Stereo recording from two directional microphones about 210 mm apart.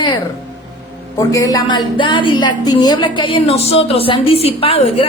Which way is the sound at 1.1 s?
15° left (ahead or behind).